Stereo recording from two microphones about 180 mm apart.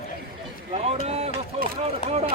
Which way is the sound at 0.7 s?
35° right (ahead or behind).